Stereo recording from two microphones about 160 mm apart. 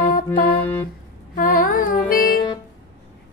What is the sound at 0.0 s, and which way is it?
Music, 65° left (ahead or behind).